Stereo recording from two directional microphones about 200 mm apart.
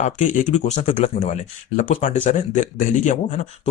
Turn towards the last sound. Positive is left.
turn(degrees=35)  # may be behind; listen again after turning